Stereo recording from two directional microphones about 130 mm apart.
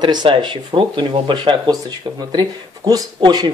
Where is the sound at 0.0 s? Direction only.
35° right (ahead or behind).